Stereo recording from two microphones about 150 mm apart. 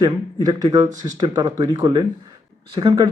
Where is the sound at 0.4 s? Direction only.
25° right (ahead or behind).